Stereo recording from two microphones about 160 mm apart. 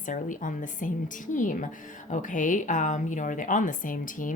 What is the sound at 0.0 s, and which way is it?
A woman's voice, 55° left (ahead or behind).